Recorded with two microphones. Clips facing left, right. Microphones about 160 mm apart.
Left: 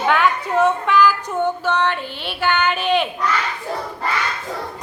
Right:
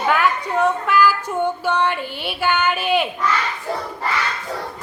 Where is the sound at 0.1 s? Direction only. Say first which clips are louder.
Left 1 dB; 5° right (ahead or behind).